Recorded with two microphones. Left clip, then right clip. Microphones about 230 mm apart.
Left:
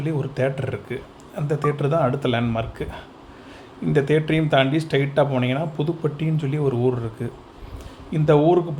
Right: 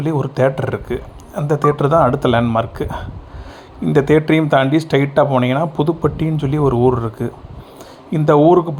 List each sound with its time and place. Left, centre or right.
0.0 s speech: centre